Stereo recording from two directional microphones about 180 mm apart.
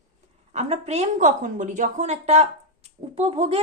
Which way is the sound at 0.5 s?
35° right (ahead or behind).